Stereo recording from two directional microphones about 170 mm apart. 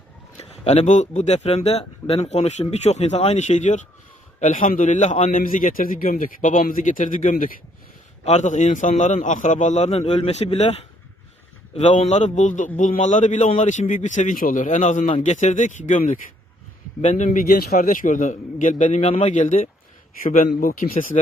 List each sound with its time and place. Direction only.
0.3 s a man's voice: 40° left (ahead or behind); by 20.9 s 55° left (ahead or behind)